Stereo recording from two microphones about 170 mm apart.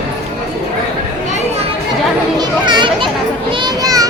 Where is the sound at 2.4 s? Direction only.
25° right (ahead or behind).